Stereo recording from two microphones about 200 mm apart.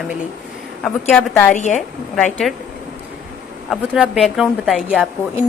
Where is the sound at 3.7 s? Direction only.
Centre (ahead or behind).